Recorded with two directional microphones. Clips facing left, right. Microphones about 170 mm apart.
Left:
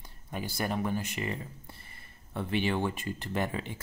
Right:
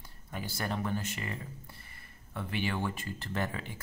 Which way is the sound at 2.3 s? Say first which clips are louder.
Left 5 dB; 25° left (ahead or behind).